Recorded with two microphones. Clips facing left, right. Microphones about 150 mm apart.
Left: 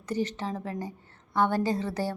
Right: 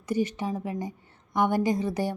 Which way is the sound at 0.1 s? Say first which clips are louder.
Right 3 dB; 10° right (ahead or behind).